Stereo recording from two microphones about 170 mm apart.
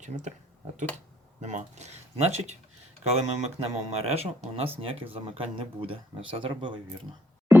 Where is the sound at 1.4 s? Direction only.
45° right (ahead or behind).